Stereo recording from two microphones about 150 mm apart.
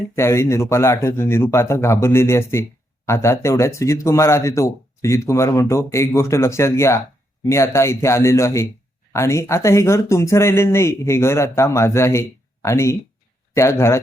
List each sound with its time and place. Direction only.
0.2 s speech: 20° left (ahead or behind)